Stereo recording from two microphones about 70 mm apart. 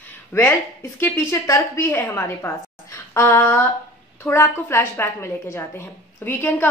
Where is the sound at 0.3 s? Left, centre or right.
Left.